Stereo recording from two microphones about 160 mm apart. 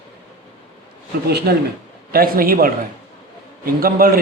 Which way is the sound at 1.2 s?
80° right.